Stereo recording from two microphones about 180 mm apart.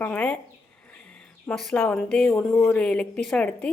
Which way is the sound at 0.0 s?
10° left (ahead or behind).